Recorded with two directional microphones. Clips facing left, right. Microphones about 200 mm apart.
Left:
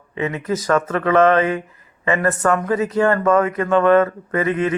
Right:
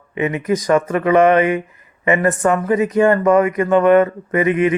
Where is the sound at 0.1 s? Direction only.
15° right (ahead or behind).